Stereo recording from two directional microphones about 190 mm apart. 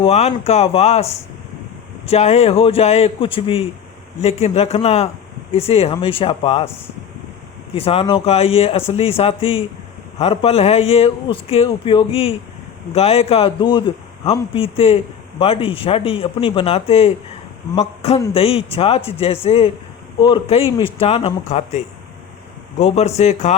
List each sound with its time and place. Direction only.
0.0 s a man's voice: 35° left (ahead or behind)
2.0 s a man's voice: 35° left (ahead or behind)
7.7 s a man's voice: 30° left (ahead or behind)
22.8 s a man's voice: 35° left (ahead or behind)